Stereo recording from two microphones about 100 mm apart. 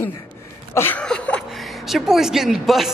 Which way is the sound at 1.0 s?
10° left (ahead or behind).